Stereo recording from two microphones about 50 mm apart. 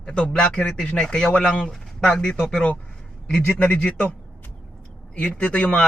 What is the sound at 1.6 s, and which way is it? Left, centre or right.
A man's voice, centre.